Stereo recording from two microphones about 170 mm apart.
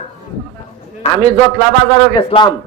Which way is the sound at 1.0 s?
40° left (ahead or behind).